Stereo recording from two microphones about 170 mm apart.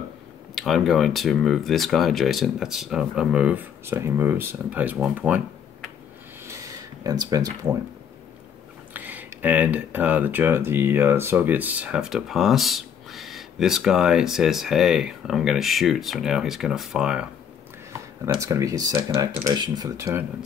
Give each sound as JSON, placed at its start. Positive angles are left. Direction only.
{"t": 0.6, "sound": "speech", "side_deg": 0}
{"t": 6.4, "sound": "a sound", "side_deg": -20}
{"t": 8.9, "sound": "speech", "side_deg": -10}
{"t": 18.2, "sound": "speech", "side_deg": -20}